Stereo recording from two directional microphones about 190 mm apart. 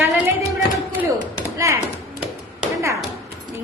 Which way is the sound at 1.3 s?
15° right (ahead or behind).